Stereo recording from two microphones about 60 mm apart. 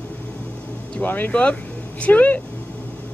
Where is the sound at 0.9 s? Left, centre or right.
Left.